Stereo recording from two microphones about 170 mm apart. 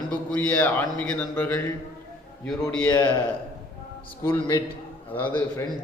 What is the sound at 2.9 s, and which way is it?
Speech, 25° left (ahead or behind).